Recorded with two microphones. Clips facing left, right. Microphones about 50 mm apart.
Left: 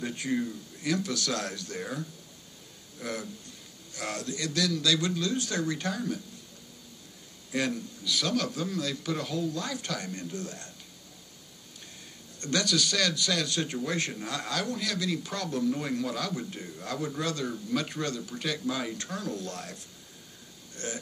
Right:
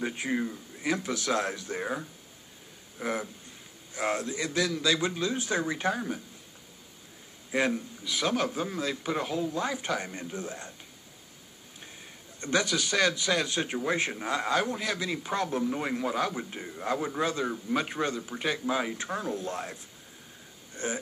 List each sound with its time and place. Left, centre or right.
0.0 s a man's voice: right
7.5 s a man's voice: right
12.4 s a man's voice: centre